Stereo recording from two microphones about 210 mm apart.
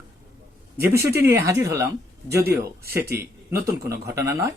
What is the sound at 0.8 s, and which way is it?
Speech, 15° right (ahead or behind).